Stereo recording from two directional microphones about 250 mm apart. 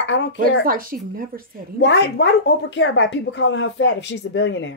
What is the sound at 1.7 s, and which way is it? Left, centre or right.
Speech, left.